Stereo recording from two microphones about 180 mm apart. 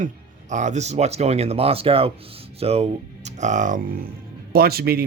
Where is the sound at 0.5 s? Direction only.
40° right (ahead or behind).